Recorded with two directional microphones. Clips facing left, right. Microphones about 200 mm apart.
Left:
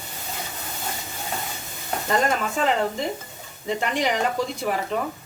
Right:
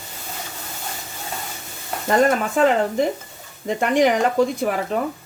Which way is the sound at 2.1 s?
50° right (ahead or behind).